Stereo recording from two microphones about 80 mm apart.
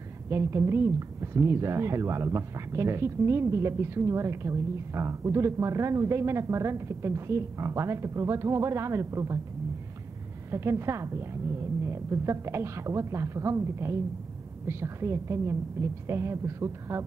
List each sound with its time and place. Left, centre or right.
0.3 s a woman's voice: right
10.5 s a woman's voice: right